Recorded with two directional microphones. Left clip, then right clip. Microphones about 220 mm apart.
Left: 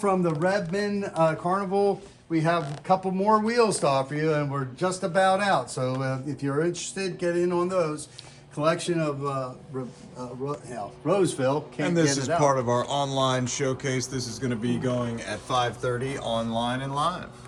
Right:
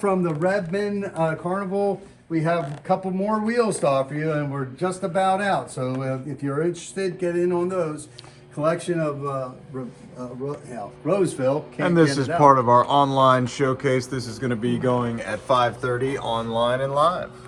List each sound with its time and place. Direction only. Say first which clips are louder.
0.0 s a man's voice: right 2 dB; 40° left (ahead or behind)
1.1 s speech: left 3 dB; 30° left (ahead or behind)
2.3 s speech: right 2 dB; centre (ahead or behind)
9.2 s a man's voice: right 2 dB; 15° left (ahead or behind)
10.5 s speech: right 1 dB; centre (ahead or behind)